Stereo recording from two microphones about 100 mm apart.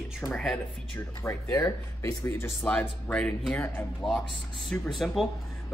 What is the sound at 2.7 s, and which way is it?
Speech, 10° left (ahead or behind).